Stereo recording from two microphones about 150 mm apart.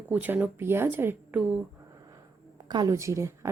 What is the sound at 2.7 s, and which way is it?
Speech, 25° right (ahead or behind).